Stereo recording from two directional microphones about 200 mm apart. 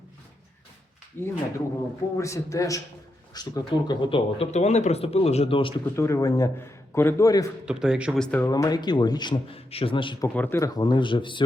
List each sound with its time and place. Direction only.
1.2 s a man's voice: 10° left (ahead or behind); by 5.7 s 25° left (ahead or behind)
6.0 s a man's voice: 15° left (ahead or behind)
7.6 s speech: 5° right (ahead or behind)
8.4 s speech: 20° left (ahead or behind)
10.2 s speech: 10° left (ahead or behind); by 11.4 s 25° left (ahead or behind)